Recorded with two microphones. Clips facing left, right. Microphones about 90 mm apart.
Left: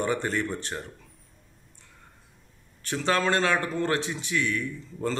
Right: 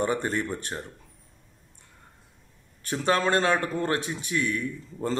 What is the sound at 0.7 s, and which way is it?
Speech, 20° right (ahead or behind).